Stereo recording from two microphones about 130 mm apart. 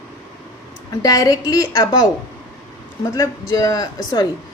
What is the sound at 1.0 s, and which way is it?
A woman's voice, 30° left (ahead or behind).